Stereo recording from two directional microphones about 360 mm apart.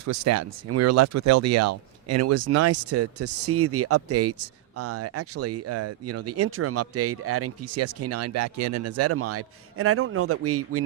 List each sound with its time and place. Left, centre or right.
0.0 s speech: right